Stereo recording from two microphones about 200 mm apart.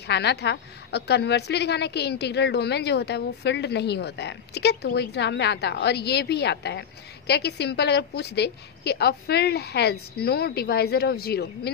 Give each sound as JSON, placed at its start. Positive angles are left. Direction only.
{"t": 0.0, "sound": "a woman's voice", "side_deg": 55}